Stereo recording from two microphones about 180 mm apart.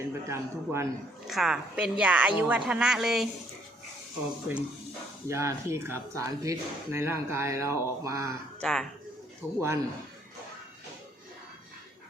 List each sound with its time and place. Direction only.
0.0 s speech: 15° right (ahead or behind)
1.3 s a woman's voice: centre (ahead or behind)
5.3 s speech: 15° right (ahead or behind)
8.6 s a woman's voice: centre (ahead or behind)
9.6 s speech: 15° right (ahead or behind)